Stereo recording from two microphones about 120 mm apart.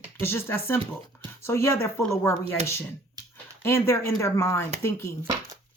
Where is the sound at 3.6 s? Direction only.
20° left (ahead or behind).